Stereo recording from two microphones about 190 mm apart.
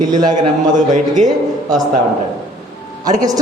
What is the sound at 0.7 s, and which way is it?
Speech, 40° right (ahead or behind).